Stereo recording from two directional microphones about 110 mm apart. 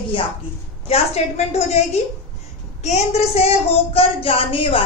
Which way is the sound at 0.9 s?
75° left (ahead or behind).